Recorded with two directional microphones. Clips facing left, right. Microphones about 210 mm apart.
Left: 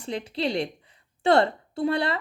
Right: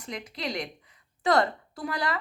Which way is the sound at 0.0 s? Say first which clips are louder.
Left 7 dB; 30° left (ahead or behind).